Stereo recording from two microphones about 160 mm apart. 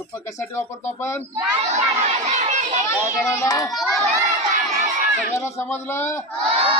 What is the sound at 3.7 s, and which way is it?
Speech, centre (ahead or behind).